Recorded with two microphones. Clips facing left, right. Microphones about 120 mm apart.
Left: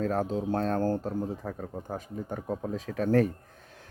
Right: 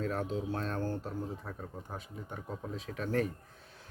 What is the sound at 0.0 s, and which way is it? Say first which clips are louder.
A woman's voice: left 6 dB; 40° left (ahead or behind).